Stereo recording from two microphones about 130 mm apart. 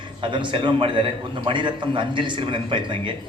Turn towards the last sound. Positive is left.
turn(degrees=-40)  # may be behind; listen again after turning